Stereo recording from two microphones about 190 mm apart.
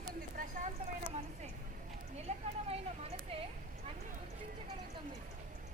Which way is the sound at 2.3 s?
35° right (ahead or behind).